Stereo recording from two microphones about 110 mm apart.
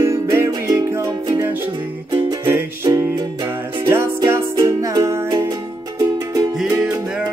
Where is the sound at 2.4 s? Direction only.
25° right (ahead or behind).